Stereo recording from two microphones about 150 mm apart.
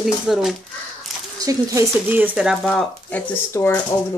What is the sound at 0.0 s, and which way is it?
Speech, centre (ahead or behind).